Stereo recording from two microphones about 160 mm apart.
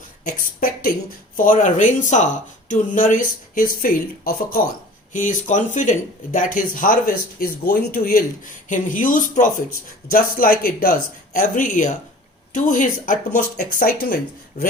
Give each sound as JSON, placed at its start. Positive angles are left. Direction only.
{"t": 0.3, "sound": "speech", "side_deg": 60}
{"t": 5.1, "sound": "speech", "side_deg": 55}